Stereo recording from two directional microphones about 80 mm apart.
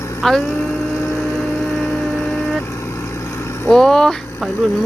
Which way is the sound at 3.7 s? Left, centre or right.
Centre.